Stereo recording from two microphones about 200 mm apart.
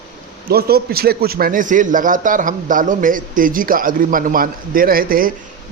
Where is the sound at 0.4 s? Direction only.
50° right (ahead or behind).